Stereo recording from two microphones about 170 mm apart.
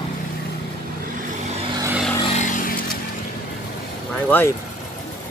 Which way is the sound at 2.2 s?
45° left (ahead or behind).